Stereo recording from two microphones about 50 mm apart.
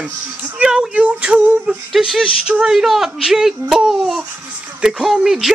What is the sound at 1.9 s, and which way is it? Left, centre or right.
Speech, centre.